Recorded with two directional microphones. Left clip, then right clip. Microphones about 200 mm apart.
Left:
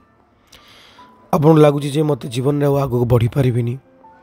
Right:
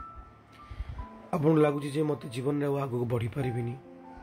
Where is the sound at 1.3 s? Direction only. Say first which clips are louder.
Left 13 dB; 55° left (ahead or behind).